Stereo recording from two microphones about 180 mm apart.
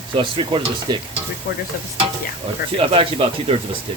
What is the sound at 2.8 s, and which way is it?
Speech, 30° right (ahead or behind).